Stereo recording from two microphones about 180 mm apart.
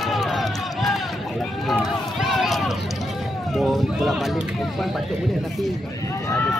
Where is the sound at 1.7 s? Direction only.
Centre (ahead or behind).